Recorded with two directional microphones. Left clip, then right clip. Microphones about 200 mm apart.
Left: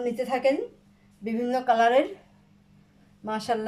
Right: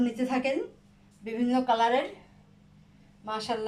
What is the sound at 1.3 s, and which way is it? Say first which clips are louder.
Speech: left 2 dB; 30° left (ahead or behind).